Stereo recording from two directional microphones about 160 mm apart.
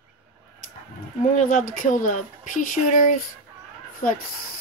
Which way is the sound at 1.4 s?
50° left (ahead or behind).